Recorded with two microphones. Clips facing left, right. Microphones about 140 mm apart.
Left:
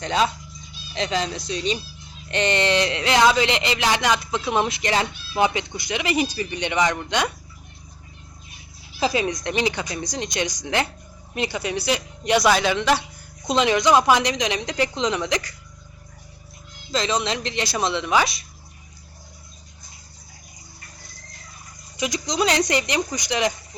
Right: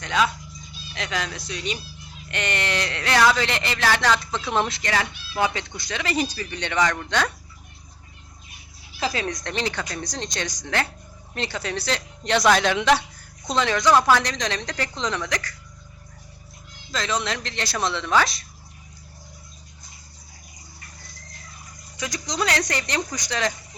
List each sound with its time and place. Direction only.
0.0 s a woman's voice: 30° left (ahead or behind); by 7.3 s 15° left (ahead or behind)
9.0 s speech: 15° left (ahead or behind)
13.5 s speech: 15° left (ahead or behind)
16.9 s speech: 20° left (ahead or behind)
21.9 s speech: 15° left (ahead or behind)